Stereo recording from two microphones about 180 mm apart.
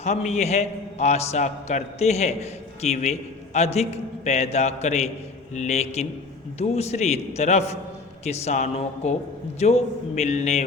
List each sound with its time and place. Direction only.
0.0 s a man's voice: 40° left (ahead or behind)